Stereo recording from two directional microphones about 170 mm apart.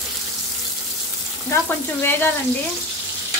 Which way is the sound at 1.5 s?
15° left (ahead or behind).